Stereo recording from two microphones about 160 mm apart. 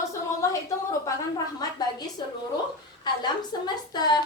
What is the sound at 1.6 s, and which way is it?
A woman's voice, 25° left (ahead or behind).